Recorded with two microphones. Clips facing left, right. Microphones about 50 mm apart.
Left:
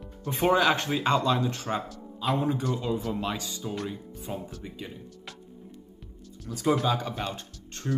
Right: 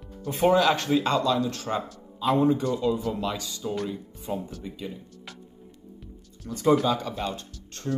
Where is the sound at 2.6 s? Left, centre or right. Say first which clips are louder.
Right 4 dB; left.